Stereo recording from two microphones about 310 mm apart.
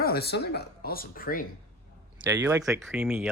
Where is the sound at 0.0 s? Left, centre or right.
Left.